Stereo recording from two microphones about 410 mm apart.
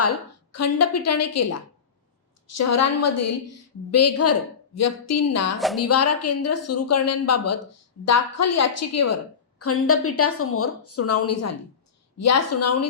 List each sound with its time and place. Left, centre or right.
0.5 s a woman's voice: left
5.5 s a woman's voice: centre
5.8 s a woman's voice: left